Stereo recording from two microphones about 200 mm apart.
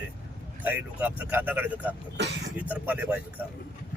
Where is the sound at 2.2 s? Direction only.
55° right (ahead or behind).